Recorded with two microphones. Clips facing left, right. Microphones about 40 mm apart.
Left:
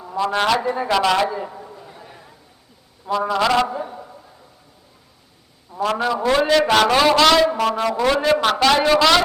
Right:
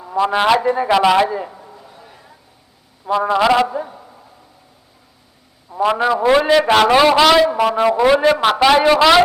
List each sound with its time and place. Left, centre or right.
0.2 s a man's voice: centre
1.5 s a sound: centre
3.1 s a man's voice: centre
5.7 s a man's voice: centre